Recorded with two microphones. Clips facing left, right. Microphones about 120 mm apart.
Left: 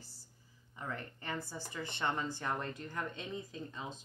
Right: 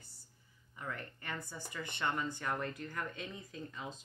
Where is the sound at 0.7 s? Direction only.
30° left (ahead or behind).